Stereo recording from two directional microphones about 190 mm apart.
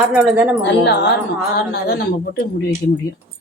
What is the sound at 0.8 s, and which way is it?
A woman's voice, 60° left (ahead or behind).